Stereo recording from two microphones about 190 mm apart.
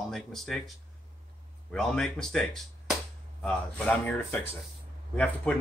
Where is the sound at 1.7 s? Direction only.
5° left (ahead or behind).